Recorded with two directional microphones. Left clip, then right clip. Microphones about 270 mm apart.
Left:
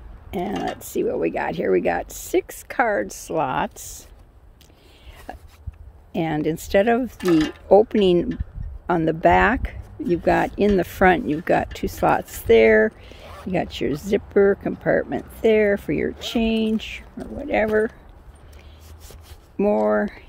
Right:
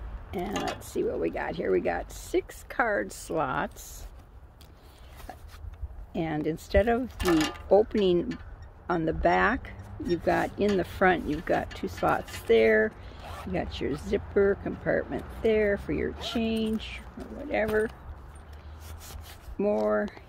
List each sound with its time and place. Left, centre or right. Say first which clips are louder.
0.3 s speech: left 6 dB; left
5.3 s a sound: left 7 dB; left
6.1 s speech: left 7 dB; left
7.2 s mechanisms: left 6 dB; centre
7.6 s speech: left 8 dB; left
19.5 s speech: left 7 dB; left